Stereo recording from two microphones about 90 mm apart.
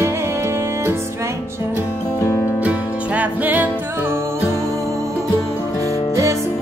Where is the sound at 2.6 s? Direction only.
15° right (ahead or behind).